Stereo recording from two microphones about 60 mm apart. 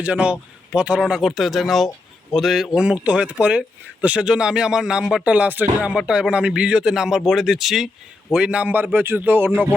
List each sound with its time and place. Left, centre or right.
0.0 s speech: right
1.2 s speech: centre
2.7 s speech: centre
5.3 s speech: right
6.0 s speech: centre
8.3 s speech: centre
8.7 s speech: right